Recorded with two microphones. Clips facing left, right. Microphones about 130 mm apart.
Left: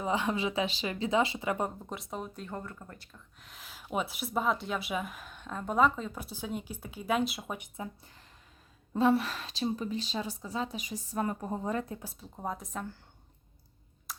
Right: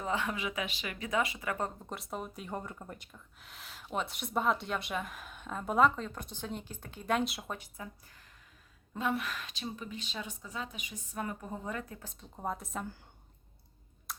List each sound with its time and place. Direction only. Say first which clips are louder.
0.0 s speech: left 4 dB; 15° left (ahead or behind)
0.3 s speech: left 6 dB; 30° left (ahead or behind)
1.9 s speech: left 1 dB; centre (ahead or behind); by 3.2 s 15° right (ahead or behind)
3.4 s speech: left 1 dB; centre (ahead or behind)
7.6 s a woman's voice: left 5 dB; 25° left (ahead or behind)
12.2 s speech: right 2 dB; centre (ahead or behind)
14.1 s clicking: even; centre (ahead or behind)